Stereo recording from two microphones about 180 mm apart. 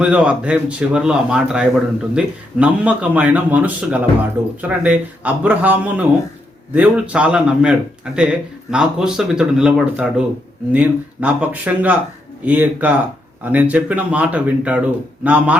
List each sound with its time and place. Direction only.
0.0 s speech: 5° right (ahead or behind)